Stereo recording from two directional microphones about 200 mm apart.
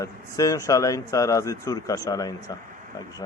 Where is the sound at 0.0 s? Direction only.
15° left (ahead or behind).